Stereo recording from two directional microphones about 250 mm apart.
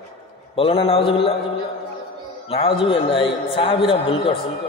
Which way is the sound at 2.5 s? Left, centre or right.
Left.